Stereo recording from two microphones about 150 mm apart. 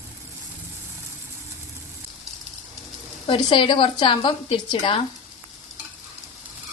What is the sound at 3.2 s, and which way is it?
A woman's voice, 35° left (ahead or behind).